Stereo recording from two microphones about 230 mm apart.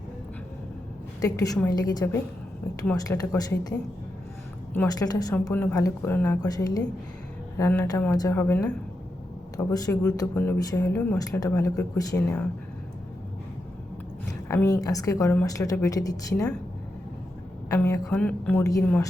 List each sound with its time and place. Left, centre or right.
1.2 s speech: centre
4.7 s speech: centre
14.4 s speech: centre
17.7 s speech: centre